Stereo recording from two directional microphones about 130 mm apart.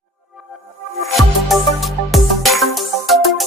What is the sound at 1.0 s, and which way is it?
Music, centre (ahead or behind).